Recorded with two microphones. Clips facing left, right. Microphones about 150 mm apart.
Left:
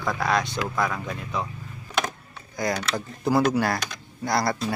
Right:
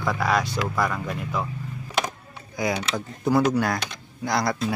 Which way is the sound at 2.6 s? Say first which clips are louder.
Right 1 dB; 5° right (ahead or behind).